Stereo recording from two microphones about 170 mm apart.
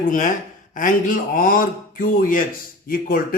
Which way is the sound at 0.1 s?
50° left (ahead or behind).